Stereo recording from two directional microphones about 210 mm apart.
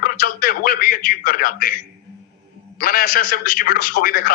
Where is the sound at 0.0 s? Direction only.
45° left (ahead or behind).